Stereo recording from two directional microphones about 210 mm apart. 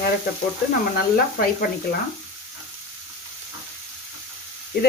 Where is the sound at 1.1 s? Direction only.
45° left (ahead or behind).